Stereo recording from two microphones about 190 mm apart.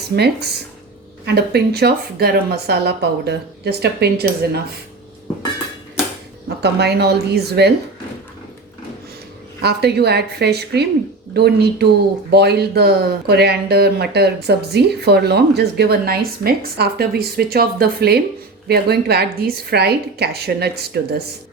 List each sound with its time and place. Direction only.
0.2 s speech: 60° right (ahead or behind)
6.6 s speech: 60° right (ahead or behind)
9.6 s speech: 60° right (ahead or behind)